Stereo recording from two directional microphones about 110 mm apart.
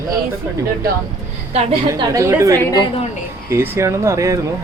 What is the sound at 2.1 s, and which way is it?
Speech, 30° right (ahead or behind).